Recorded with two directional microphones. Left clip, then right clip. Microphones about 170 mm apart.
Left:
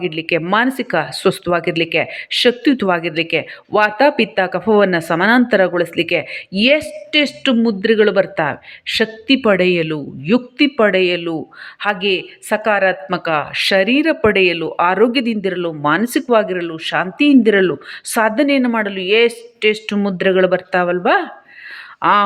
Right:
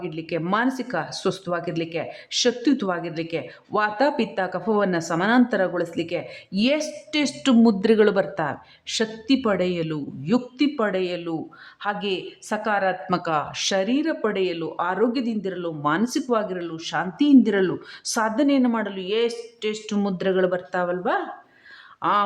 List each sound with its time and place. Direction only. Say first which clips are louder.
0.0 s a woman's voice: left 10 dB; 15° left (ahead or behind)